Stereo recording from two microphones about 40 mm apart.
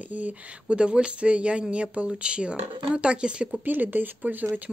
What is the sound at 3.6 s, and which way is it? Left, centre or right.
Speech, right.